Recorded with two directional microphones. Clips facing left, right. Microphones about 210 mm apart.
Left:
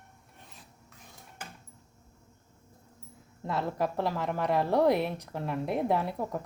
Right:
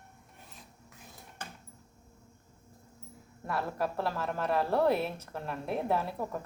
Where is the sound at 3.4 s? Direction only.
20° left (ahead or behind).